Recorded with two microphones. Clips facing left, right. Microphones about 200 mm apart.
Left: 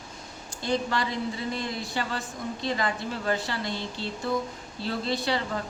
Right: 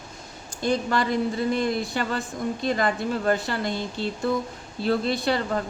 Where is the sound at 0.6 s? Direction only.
50° right (ahead or behind).